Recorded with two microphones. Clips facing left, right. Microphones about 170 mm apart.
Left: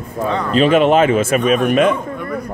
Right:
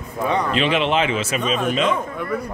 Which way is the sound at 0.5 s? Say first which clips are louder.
Left 12 dB; 45° left (ahead or behind).